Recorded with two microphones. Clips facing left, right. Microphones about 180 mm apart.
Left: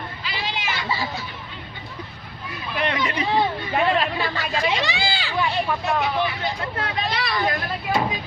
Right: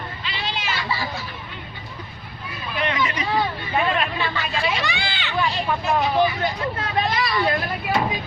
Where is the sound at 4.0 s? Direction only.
40° left (ahead or behind).